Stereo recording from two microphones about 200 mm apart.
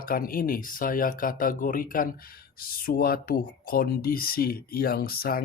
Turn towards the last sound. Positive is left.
turn(degrees=50)  # may be behind; listen again after turning